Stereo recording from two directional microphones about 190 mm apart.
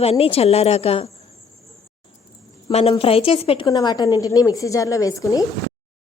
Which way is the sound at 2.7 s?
30° left (ahead or behind).